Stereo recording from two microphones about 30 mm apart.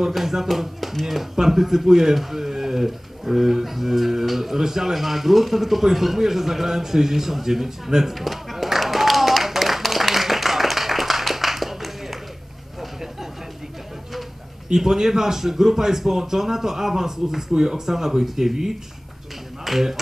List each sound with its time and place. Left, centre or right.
0.1 s speech: centre
8.1 s a sound: centre
14.7 s speech: centre